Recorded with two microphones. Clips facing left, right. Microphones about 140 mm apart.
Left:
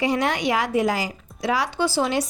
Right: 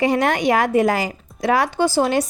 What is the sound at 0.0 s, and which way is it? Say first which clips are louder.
A woman's voice: right 4 dB; 50° right (ahead or behind).